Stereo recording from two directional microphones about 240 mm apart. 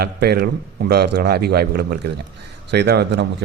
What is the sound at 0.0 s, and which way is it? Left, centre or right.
A man's voice, right.